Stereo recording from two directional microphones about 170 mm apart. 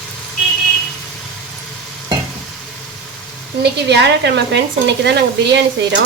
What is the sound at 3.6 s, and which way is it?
Speech, 85° right.